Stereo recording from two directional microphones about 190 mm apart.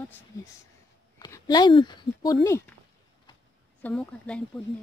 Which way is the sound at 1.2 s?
20° left (ahead or behind).